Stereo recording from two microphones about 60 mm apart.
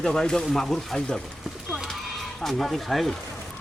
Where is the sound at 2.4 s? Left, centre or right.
Centre.